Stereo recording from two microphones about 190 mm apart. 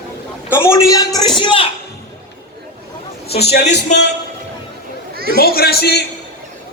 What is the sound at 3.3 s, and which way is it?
Speech, 60° left (ahead or behind).